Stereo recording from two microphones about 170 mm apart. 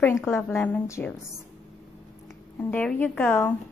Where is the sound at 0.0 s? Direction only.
15° left (ahead or behind).